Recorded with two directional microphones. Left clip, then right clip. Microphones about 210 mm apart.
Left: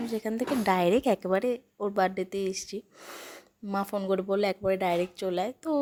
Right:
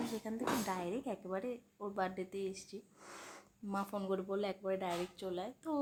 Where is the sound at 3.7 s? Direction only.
25° left (ahead or behind).